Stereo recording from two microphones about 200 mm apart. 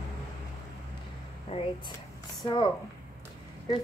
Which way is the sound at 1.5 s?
25° left (ahead or behind).